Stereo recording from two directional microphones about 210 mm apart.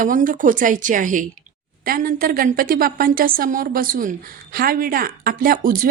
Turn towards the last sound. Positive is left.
turn(degrees=-40)  # may be behind; listen again after turning